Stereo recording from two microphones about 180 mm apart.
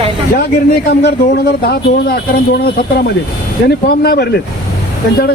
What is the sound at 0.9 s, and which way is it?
A man's voice, 65° left (ahead or behind).